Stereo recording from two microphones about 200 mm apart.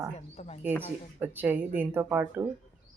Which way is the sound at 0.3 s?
35° left (ahead or behind).